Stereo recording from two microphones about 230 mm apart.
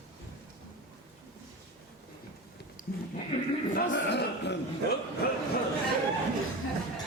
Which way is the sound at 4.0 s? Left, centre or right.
Left.